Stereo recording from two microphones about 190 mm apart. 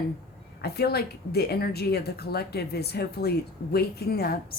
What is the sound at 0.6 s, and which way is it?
A woman's voice, 55° left (ahead or behind).